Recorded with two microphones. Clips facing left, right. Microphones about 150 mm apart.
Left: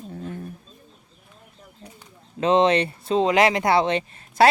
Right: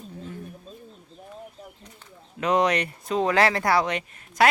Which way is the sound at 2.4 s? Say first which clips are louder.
Left 4 dB; 25° left (ahead or behind).